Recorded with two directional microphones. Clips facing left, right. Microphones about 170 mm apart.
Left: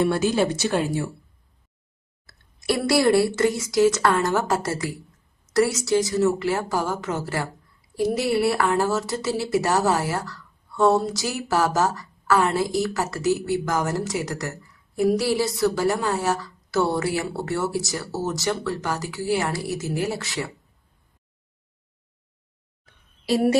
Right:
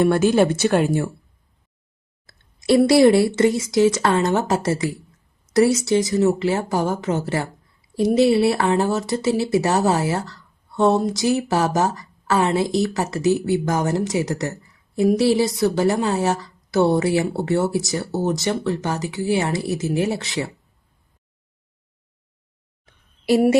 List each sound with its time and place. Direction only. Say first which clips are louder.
0.0 s speech: right 5 dB; 50° right (ahead or behind)
2.2 s speech: right 3 dB; 20° right (ahead or behind)